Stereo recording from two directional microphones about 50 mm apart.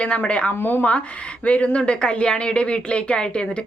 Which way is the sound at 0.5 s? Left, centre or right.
Left.